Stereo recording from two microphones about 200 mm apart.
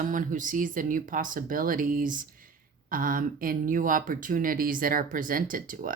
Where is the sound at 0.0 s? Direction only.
40° right (ahead or behind).